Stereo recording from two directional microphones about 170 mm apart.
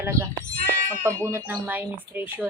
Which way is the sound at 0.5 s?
60° right (ahead or behind).